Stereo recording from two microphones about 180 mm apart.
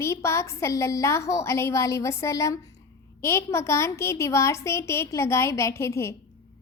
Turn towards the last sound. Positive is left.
turn(degrees=15)  # may be behind; listen again after turning